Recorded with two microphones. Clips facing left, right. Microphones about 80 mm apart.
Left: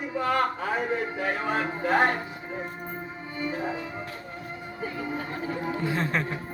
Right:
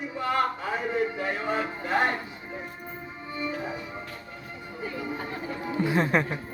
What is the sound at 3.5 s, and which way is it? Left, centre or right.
Music, left.